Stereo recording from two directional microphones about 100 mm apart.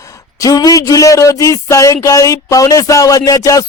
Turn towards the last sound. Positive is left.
turn(degrees=35)  # may be behind; listen again after turning